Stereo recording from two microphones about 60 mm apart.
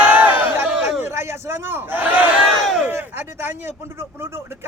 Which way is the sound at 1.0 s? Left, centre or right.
Right.